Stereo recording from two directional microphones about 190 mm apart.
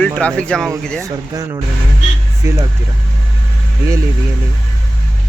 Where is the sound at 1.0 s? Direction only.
20° right (ahead or behind).